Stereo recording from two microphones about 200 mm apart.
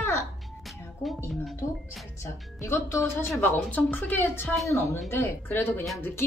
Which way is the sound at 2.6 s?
15° left (ahead or behind).